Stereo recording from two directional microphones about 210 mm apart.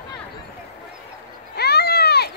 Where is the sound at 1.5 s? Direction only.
50° left (ahead or behind).